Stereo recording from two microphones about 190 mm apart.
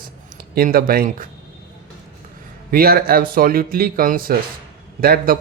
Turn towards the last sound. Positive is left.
turn(degrees=-50)  # may be behind; listen again after turning